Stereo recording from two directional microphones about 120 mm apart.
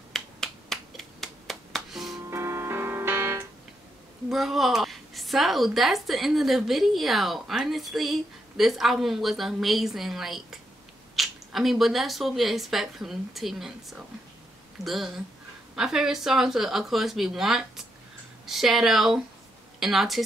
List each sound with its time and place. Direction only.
0.1 s finger snapping: 5° left (ahead or behind)
2.2 s music: 20° right (ahead or behind)
4.3 s a woman's voice: centre (ahead or behind)